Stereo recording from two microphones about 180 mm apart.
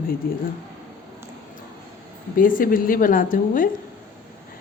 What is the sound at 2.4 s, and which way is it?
A woman's voice, 50° left (ahead or behind).